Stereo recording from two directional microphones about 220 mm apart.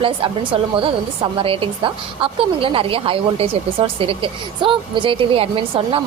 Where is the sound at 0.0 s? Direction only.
25° right (ahead or behind).